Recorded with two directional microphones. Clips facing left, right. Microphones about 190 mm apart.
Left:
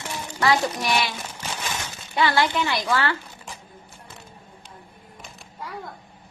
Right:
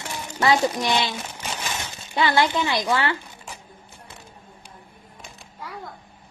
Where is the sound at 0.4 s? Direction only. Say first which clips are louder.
Right 2 dB; 20° right (ahead or behind).